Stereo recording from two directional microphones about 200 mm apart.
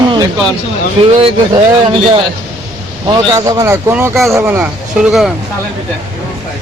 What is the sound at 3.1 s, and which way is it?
Speech, 20° right (ahead or behind).